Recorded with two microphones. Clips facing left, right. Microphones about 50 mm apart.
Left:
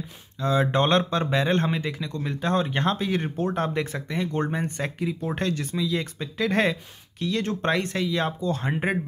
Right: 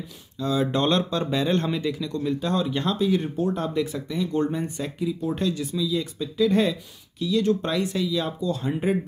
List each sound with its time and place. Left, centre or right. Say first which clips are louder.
0.4 s speech: left 1 dB; left